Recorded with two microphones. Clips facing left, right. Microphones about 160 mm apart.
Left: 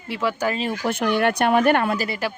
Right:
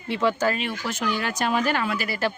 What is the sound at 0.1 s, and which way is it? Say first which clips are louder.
Speech: right 1 dB; 5° left (ahead or behind).